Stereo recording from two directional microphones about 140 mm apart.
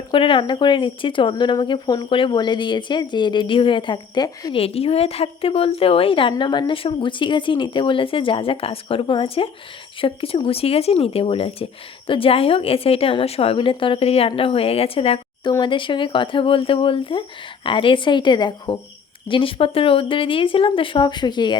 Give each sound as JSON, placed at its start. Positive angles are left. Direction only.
{"t": 0.1, "sound": "speech", "side_deg": 40}
{"t": 4.6, "sound": "speech", "side_deg": 45}